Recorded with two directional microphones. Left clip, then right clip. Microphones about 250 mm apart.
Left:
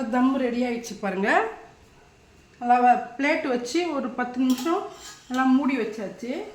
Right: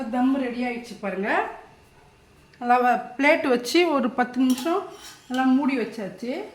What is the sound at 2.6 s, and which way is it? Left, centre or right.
A woman's voice, centre.